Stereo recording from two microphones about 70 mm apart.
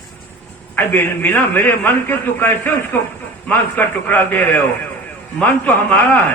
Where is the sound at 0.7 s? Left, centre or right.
Left.